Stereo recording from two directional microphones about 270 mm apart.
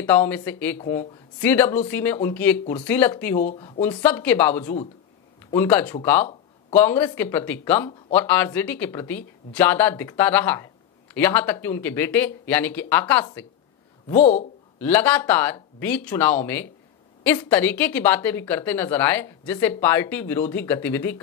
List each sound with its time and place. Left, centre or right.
0.0 s speech: centre
14.0 s speech: left
14.8 s speech: centre